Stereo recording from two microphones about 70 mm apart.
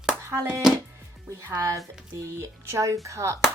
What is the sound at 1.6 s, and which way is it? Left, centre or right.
Speech, right.